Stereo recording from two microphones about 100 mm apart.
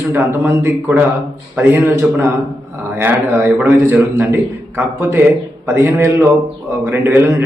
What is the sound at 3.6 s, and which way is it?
A man's voice, 25° right (ahead or behind).